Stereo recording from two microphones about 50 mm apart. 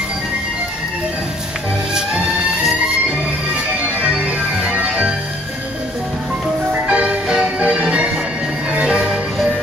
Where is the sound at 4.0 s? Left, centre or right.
Right.